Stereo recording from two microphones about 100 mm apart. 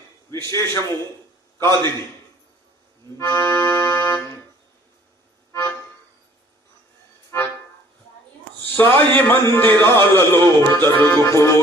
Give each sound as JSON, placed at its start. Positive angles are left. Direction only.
{"t": 0.3, "sound": "a man's voice", "side_deg": 30}
{"t": 3.2, "sound": "music", "side_deg": 25}
{"t": 5.5, "sound": "music", "side_deg": 25}
{"t": 7.3, "sound": "music", "side_deg": 25}
{"t": 8.7, "sound": "a man's voice", "side_deg": 20}